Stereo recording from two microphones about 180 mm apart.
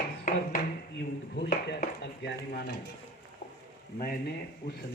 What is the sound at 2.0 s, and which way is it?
Speech, 70° left (ahead or behind).